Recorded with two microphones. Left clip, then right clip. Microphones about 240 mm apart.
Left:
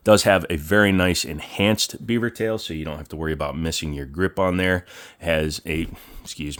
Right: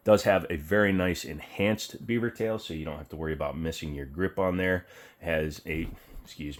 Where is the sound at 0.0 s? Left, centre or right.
Left.